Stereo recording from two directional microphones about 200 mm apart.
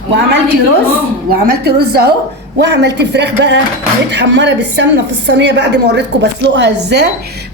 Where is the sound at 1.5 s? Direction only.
55° right (ahead or behind).